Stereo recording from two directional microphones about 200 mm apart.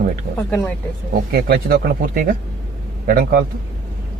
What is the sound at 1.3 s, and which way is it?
A man's voice, 50° right (ahead or behind).